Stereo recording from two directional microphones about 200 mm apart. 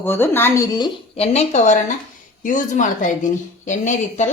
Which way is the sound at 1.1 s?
30° left (ahead or behind).